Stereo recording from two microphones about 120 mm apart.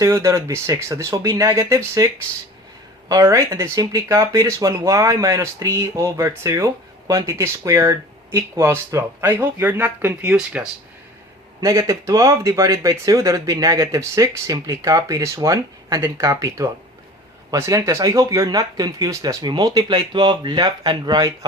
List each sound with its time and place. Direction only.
0.0 s speech: 25° right (ahead or behind)
3.1 s speech: 25° right (ahead or behind); by 10.7 s 10° right (ahead or behind)
11.6 s speech: 25° right (ahead or behind)